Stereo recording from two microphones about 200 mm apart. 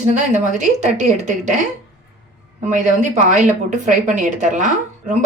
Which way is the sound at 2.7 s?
35° right (ahead or behind).